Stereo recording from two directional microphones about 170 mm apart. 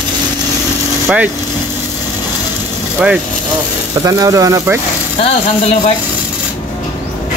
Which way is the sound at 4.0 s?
20° right (ahead or behind).